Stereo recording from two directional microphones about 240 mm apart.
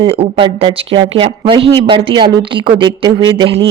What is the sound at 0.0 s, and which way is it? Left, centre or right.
Speech, right.